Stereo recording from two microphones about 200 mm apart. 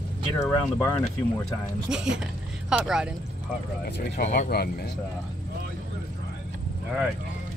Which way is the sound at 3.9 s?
55° left (ahead or behind).